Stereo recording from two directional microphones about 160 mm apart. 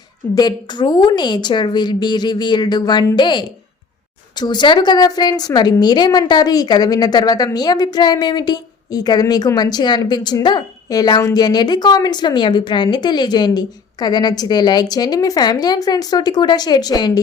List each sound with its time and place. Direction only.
0.3 s a woman's voice: 25° left (ahead or behind)